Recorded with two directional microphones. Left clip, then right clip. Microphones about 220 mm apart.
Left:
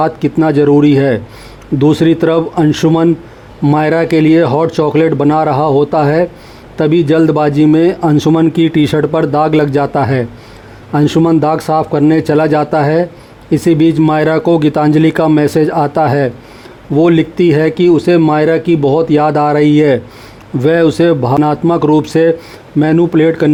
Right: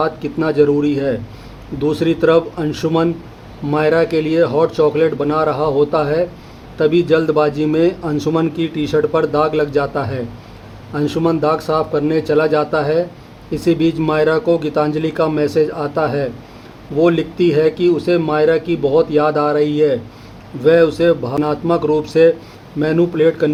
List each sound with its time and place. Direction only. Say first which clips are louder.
0.0 s speech: left 6 dB; 40° left (ahead or behind)